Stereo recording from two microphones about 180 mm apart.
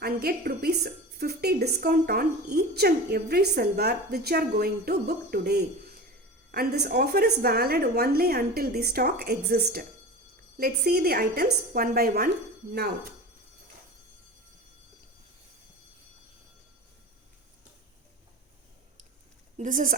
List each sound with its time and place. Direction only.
0.0 s a woman's voice: 60° right (ahead or behind)
19.5 s speech: 50° right (ahead or behind)